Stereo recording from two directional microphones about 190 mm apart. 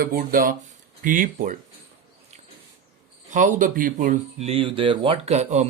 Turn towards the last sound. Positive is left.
turn(degrees=-35)  # may be behind; listen again after turning